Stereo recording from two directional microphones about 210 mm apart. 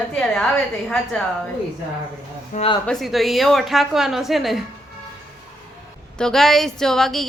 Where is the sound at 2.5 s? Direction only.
25° left (ahead or behind).